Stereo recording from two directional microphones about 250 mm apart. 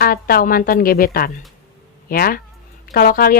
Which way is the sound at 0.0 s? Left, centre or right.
Left.